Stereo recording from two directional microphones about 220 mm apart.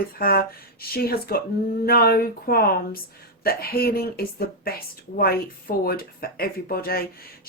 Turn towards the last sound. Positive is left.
turn(degrees=45)  # may be behind; listen again after turning